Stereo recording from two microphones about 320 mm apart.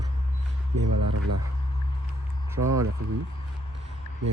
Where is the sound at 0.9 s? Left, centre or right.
Right.